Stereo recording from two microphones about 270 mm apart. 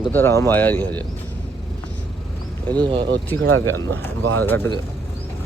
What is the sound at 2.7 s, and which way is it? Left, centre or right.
Speech, centre.